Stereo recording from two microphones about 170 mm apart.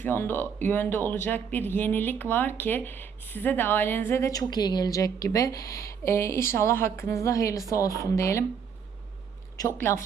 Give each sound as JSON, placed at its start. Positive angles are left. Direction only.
{"t": 0.0, "sound": "speech", "side_deg": 10}
{"t": 9.6, "sound": "speech", "side_deg": 15}